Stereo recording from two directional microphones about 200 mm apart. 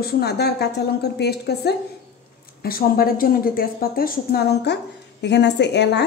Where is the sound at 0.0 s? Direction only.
55° left (ahead or behind).